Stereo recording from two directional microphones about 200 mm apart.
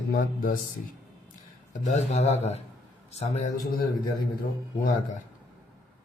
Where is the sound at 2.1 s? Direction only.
35° left (ahead or behind).